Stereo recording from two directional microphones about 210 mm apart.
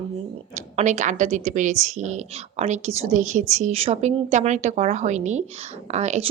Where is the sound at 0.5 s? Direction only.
35° right (ahead or behind).